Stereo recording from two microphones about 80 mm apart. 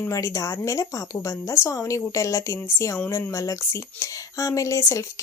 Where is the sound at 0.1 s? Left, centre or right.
Left.